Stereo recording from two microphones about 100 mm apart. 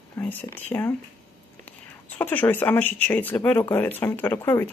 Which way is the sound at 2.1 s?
20° left (ahead or behind).